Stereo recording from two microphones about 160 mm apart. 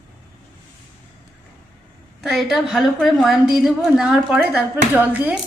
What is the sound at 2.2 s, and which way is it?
A woman's voice, centre (ahead or behind).